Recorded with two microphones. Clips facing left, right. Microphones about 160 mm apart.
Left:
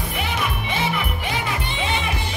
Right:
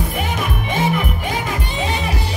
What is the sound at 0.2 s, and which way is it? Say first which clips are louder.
Music: right 3 dB; 45° right (ahead or behind).